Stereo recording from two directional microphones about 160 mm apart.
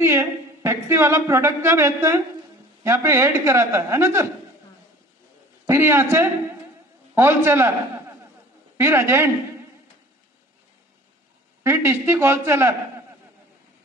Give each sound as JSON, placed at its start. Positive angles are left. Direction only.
{"t": 0.0, "sound": "a woman's voice", "side_deg": -15}
{"t": 5.7, "sound": "a man's voice", "side_deg": -15}
{"t": 8.7, "sound": "a man's voice", "side_deg": -15}
{"t": 11.6, "sound": "a man's voice", "side_deg": -15}